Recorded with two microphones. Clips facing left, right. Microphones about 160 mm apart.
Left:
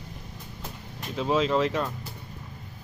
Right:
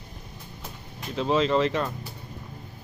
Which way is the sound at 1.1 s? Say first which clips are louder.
Right 1 dB; 5° left (ahead or behind).